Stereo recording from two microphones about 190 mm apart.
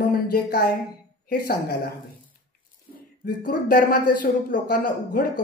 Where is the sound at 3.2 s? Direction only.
50° left (ahead or behind).